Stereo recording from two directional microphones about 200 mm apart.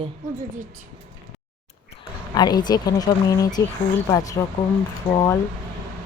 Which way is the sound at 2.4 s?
20° left (ahead or behind).